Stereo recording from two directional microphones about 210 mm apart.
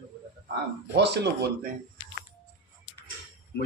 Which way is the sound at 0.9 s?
55° right (ahead or behind).